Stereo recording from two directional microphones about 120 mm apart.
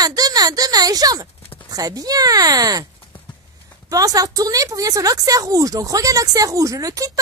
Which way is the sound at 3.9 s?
30° right (ahead or behind).